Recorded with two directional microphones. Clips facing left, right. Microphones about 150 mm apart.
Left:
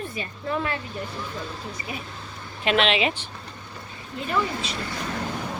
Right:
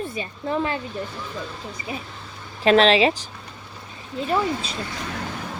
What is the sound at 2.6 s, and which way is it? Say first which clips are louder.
Speech: right 6 dB; 35° right (ahead or behind).